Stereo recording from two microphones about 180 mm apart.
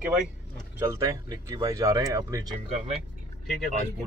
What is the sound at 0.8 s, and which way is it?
Speech, 15° right (ahead or behind).